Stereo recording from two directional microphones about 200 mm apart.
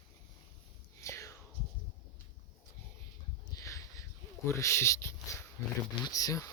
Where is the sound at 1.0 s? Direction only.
15° left (ahead or behind).